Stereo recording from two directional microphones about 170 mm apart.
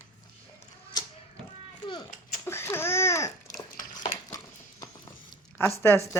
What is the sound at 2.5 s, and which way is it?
Babbling, 15° left (ahead or behind).